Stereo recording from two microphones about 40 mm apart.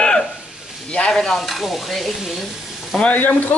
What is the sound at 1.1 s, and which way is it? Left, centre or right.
Stir, centre.